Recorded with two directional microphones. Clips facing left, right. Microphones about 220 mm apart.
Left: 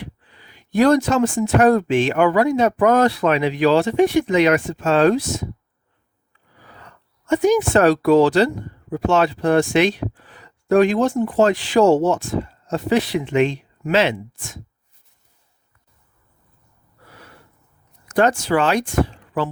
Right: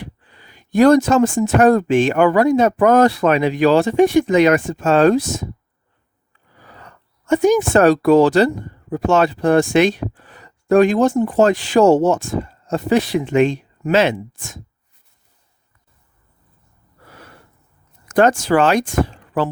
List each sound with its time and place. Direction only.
0.0 s speech: 45° right (ahead or behind)
6.6 s speech: 45° right (ahead or behind)
18.4 s speech: 45° right (ahead or behind)